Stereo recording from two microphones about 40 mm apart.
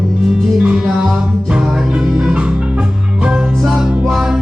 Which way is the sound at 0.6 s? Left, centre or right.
Right.